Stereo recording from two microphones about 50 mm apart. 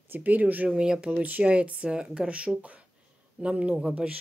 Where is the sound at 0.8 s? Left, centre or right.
Centre.